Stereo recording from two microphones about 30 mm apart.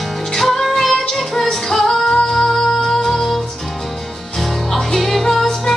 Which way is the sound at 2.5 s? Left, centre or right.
Centre.